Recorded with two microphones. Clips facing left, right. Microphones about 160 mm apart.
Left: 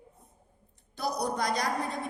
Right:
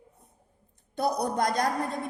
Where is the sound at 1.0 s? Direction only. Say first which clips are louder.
Right 4 dB; 55° right (ahead or behind).